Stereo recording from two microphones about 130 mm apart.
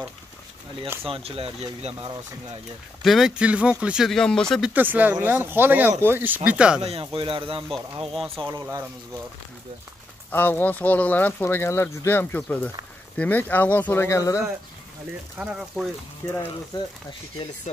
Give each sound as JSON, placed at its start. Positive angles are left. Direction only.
{"t": 1.0, "sound": "speech", "side_deg": -45}
{"t": 3.0, "sound": "speech", "side_deg": 0}
{"t": 4.6, "sound": "speech", "side_deg": -15}
{"t": 6.8, "sound": "speech", "side_deg": -50}
{"t": 8.1, "sound": "speech", "side_deg": 0}
{"t": 10.3, "sound": "speech", "side_deg": 15}
{"t": 15.3, "sound": "speech", "side_deg": -5}
{"t": 16.2, "sound": "speech", "side_deg": 15}